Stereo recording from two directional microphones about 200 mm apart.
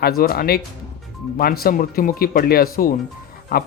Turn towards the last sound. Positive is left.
turn(degrees=50)  # may be behind; listen again after turning